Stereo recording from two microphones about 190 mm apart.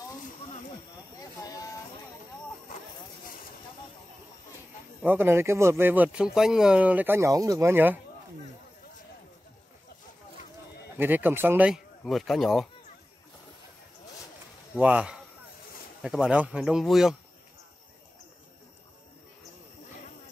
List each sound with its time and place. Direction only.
1.3 s a sound: 20° left (ahead or behind)
5.0 s speech: 10° right (ahead or behind)
11.0 s speech: 10° right (ahead or behind)
14.8 s speech: 5° right (ahead or behind)